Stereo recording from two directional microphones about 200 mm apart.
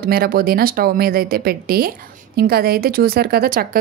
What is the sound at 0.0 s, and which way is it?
Speech, 50° right (ahead or behind).